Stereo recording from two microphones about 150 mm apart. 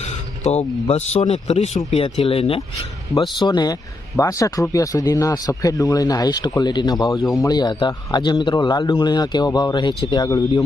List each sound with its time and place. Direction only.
0.0 s speech: 50° left (ahead or behind); by 10.6 s 25° left (ahead or behind)